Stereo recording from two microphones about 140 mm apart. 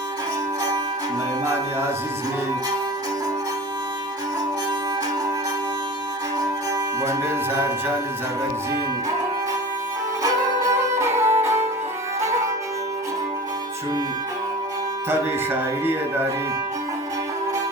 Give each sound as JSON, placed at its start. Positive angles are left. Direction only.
{"t": 7.0, "sound": "music", "side_deg": -20}
{"t": 10.2, "sound": "music", "side_deg": -20}
{"t": 15.1, "sound": "music", "side_deg": -15}